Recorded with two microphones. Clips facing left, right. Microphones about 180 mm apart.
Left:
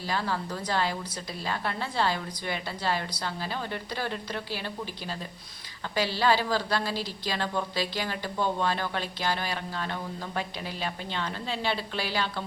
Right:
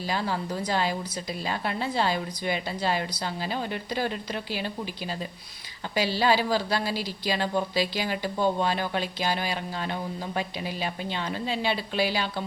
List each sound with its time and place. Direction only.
0.1 s speech: 15° right (ahead or behind)
6.0 s speech: 15° right (ahead or behind)